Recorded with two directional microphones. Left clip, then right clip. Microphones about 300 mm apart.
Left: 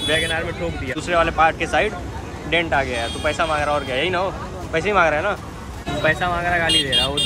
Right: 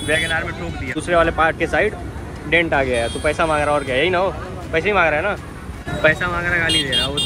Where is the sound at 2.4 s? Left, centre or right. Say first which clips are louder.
Right 3 dB; left.